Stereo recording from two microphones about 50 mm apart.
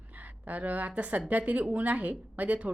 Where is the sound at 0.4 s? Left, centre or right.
Right.